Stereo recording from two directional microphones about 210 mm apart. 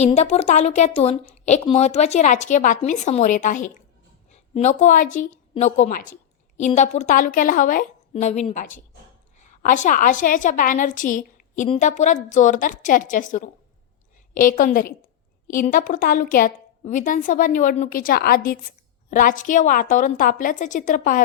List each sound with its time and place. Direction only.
0.0 s a woman's voice: 30° left (ahead or behind)
14.6 s a woman's voice: 40° left (ahead or behind)